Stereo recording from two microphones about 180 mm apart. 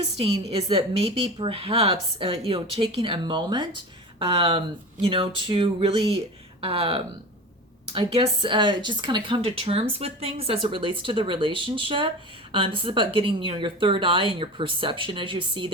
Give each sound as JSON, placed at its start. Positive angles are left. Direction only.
{"t": 0.2, "sound": "a woman's voice", "side_deg": -35}